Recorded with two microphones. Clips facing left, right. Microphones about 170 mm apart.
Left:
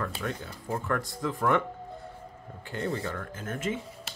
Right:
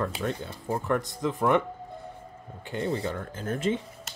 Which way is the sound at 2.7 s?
20° right (ahead or behind).